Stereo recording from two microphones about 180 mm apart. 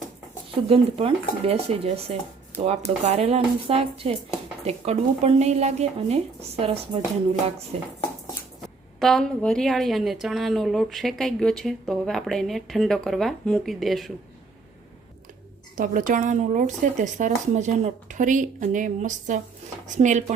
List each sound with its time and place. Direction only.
0.5 s speech: 30° right (ahead or behind)
8.6 s a woman's voice: centre (ahead or behind)
15.7 s speech: 50° right (ahead or behind)